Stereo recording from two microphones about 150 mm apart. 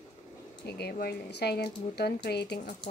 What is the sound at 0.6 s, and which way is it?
A woman's voice, 90° left.